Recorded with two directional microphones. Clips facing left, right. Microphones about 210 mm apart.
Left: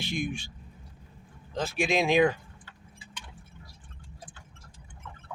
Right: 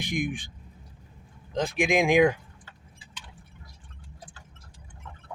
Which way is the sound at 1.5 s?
15° right (ahead or behind).